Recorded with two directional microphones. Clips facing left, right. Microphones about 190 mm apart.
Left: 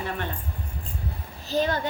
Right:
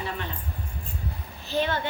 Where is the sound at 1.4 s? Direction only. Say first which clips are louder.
Left 2 dB; 40° left (ahead or behind).